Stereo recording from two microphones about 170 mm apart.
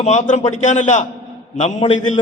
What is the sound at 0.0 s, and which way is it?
A man's voice, 45° left (ahead or behind).